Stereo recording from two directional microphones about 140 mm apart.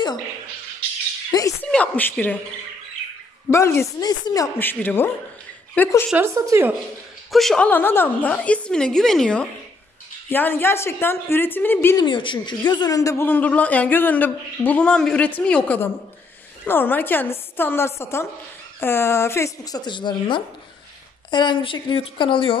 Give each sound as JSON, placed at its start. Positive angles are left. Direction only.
{"t": 1.6, "sound": "a woman's voice", "side_deg": 10}
{"t": 3.4, "sound": "a woman's voice", "side_deg": 20}
{"t": 4.6, "sound": "speech", "side_deg": 15}
{"t": 6.1, "sound": "speech", "side_deg": -20}
{"t": 7.2, "sound": "speech", "side_deg": 0}
{"t": 12.0, "sound": "a woman's voice", "side_deg": 35}